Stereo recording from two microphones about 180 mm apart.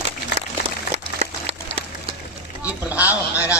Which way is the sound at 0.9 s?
35° right (ahead or behind).